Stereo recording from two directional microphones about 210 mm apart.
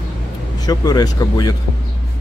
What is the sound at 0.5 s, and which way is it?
Speech, 20° left (ahead or behind).